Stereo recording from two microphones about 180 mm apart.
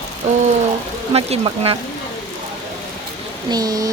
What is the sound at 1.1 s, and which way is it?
Speech, 35° right (ahead or behind).